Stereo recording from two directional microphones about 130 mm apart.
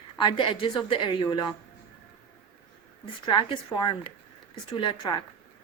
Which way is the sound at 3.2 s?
35° left (ahead or behind).